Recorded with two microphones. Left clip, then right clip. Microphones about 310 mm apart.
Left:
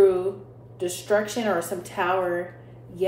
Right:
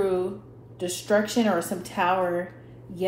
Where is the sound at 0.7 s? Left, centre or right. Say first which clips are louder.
Even; right.